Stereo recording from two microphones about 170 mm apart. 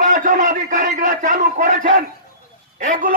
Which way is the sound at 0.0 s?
50° right (ahead or behind).